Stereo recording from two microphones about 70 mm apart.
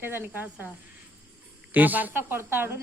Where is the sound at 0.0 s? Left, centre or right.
Right.